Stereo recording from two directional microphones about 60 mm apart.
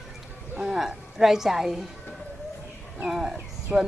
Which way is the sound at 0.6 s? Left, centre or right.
Centre.